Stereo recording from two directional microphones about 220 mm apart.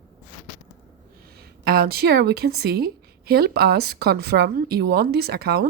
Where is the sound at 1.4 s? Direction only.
45° right (ahead or behind).